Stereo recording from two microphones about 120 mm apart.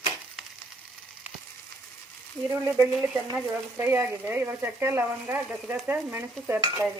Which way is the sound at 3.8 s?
20° right (ahead or behind).